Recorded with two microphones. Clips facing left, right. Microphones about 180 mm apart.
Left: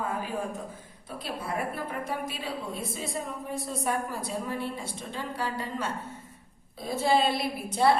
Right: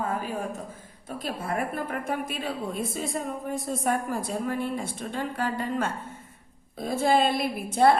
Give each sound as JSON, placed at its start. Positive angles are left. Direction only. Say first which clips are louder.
{"t": 1.2, "sound": "a woman's voice", "louder": "right 3 dB", "side_deg": -50}